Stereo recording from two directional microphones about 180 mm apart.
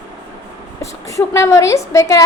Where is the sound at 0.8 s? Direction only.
15° left (ahead or behind).